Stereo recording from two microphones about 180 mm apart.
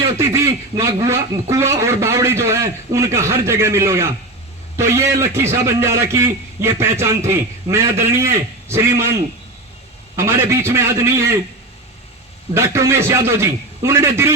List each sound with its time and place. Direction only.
0.2 s a man's voice: 15° right (ahead or behind)
10.2 s a man's voice: 15° right (ahead or behind)
12.5 s a man's voice: 15° right (ahead or behind)